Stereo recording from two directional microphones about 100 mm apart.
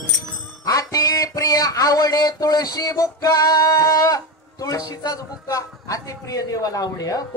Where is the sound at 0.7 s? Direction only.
35° left (ahead or behind).